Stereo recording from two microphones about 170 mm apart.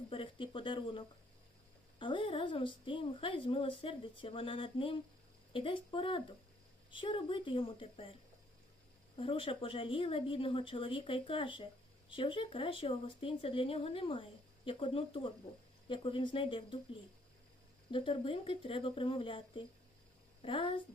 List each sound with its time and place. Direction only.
0.1 s speech: 30° left (ahead or behind)
9.1 s speech: 30° left (ahead or behind)
17.9 s speech: 30° left (ahead or behind)